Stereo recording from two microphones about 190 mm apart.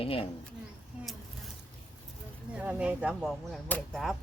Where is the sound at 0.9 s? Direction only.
5° right (ahead or behind).